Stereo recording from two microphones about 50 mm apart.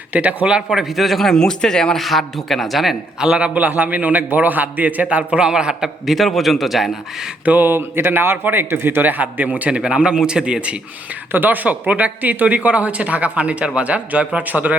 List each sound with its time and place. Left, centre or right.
0.1 s speech: right; by 2.0 s centre
2.0 s speech: centre
3.2 s a man's voice: centre
6.1 s speech: centre
7.4 s a man's voice: right
11.3 s speech: right